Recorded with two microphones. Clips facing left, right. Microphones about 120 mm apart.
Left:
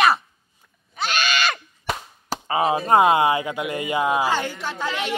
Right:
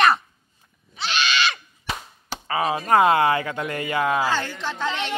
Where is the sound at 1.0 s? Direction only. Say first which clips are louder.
Left 1 dB; 45° left (ahead or behind).